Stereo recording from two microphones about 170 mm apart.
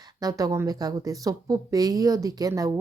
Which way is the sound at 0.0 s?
20° right (ahead or behind).